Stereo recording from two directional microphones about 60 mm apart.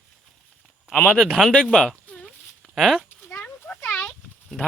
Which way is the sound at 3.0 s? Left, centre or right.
Left.